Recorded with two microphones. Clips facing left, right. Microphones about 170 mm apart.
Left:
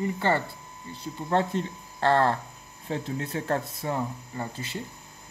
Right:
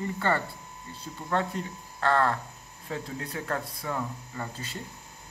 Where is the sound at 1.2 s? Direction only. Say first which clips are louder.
Left 4 dB; 25° left (ahead or behind).